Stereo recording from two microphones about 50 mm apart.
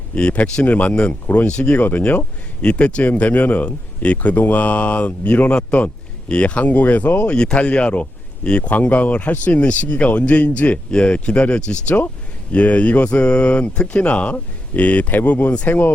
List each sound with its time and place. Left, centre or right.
0.1 s speech: left
3.1 s speech: left
7.3 s speech: left
8.7 s speech: left
9.6 s speech: left